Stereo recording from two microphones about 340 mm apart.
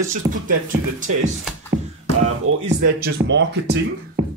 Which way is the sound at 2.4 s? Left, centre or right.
Right.